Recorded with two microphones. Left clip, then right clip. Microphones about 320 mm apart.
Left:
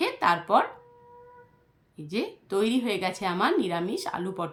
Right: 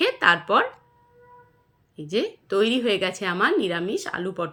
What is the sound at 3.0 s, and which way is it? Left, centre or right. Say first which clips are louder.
Speech: right 4 dB; centre.